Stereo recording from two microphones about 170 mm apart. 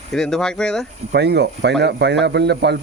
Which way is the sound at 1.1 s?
75° right (ahead or behind).